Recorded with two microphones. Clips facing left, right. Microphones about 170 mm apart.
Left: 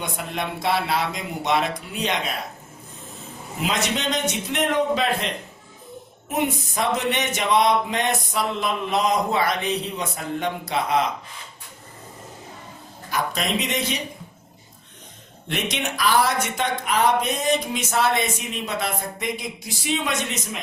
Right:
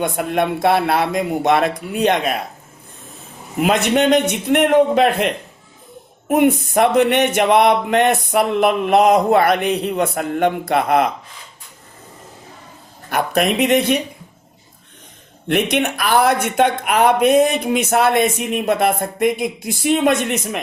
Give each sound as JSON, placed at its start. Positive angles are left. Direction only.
{"t": 0.0, "sound": "speech", "side_deg": -55}
{"t": 3.6, "sound": "speech", "side_deg": -55}
{"t": 13.1, "sound": "speech", "side_deg": -60}
{"t": 15.4, "sound": "speech", "side_deg": -55}